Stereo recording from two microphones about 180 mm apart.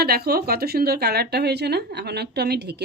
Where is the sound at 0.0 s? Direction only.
60° right (ahead or behind).